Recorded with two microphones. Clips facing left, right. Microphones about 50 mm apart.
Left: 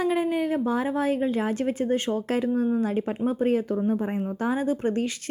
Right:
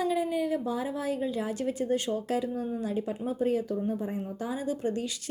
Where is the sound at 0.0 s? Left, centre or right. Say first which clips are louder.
Left 4 dB; left.